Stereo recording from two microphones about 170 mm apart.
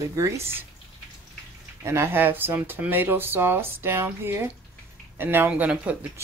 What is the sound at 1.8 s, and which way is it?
Speech, 15° right (ahead or behind).